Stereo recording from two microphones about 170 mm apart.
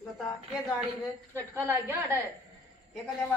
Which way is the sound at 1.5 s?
15° right (ahead or behind).